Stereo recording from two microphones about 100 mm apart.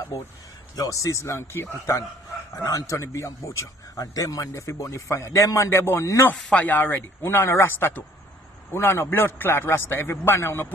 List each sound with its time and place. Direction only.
0.7 s a man's voice: 30° left (ahead or behind)
6.3 s a man's voice: 10° left (ahead or behind)